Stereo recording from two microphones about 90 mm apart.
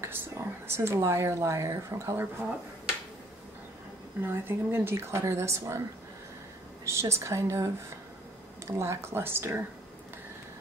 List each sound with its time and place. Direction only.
0.0 s speech: 25° right (ahead or behind)
4.2 s a woman's voice: 25° right (ahead or behind)
6.8 s a woman's voice: 30° right (ahead or behind)